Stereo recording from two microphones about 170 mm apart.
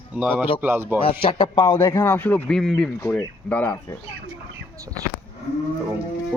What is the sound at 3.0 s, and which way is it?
Speech, 15° left (ahead or behind).